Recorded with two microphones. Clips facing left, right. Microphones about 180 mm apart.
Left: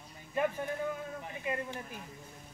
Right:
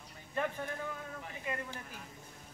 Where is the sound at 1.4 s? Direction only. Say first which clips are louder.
Left 4 dB; 20° left (ahead or behind).